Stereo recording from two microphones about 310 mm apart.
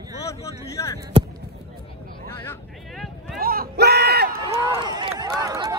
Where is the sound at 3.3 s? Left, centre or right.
Right.